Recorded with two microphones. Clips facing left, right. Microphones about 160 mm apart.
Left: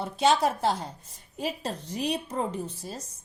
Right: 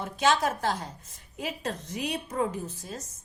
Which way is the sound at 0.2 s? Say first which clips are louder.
Left 2 dB; 30° left (ahead or behind).